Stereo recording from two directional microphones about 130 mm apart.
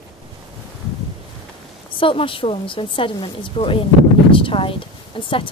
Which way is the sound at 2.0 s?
40° left (ahead or behind).